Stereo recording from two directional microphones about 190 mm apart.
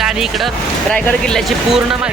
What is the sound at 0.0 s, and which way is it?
Speech, centre (ahead or behind).